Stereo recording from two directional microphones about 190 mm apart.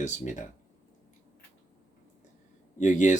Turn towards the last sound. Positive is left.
turn(degrees=40)  # may be behind; listen again after turning